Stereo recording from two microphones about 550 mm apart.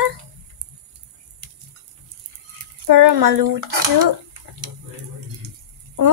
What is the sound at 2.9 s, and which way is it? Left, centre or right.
Speech, right.